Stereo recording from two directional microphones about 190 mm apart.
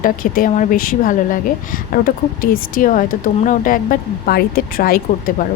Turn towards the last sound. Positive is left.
turn(degrees=50)  # may be behind; listen again after turning